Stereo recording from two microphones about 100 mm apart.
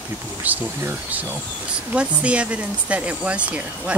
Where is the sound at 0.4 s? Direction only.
15° right (ahead or behind).